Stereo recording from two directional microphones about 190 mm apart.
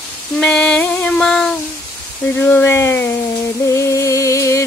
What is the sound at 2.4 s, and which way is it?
Speech, 10° left (ahead or behind).